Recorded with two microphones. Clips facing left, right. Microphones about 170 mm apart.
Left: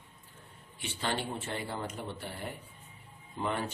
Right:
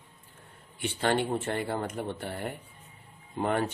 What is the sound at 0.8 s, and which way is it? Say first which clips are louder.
Speech: right 8 dB; 55° right (ahead or behind).